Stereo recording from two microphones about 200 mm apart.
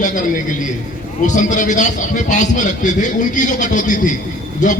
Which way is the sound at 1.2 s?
40° left (ahead or behind).